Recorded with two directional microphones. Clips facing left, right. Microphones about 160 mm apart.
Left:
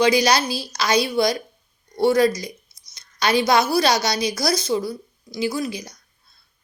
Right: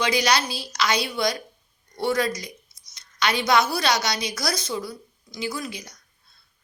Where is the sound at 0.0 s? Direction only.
35° left (ahead or behind).